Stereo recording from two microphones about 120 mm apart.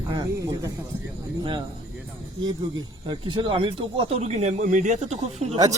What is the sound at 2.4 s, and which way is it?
Speech, 40° right (ahead or behind).